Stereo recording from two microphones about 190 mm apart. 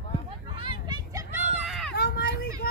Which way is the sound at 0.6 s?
25° right (ahead or behind).